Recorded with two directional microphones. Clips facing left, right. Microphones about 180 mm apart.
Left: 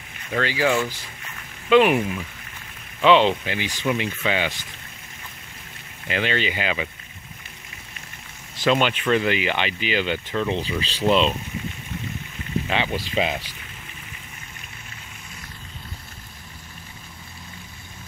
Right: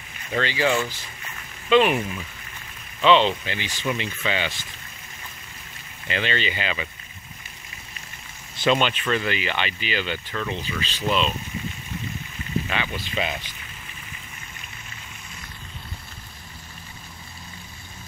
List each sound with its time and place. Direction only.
0.3 s speech: 5° left (ahead or behind)
6.0 s speech: 10° left (ahead or behind)
8.5 s speech: 5° left (ahead or behind); by 10.6 s 20° left (ahead or behind)
10.6 s speech: 30° left (ahead or behind)
12.6 s speech: 20° left (ahead or behind)
12.9 s speech: 35° left (ahead or behind)